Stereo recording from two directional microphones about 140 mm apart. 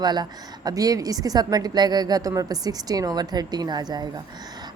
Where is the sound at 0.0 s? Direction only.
30° right (ahead or behind).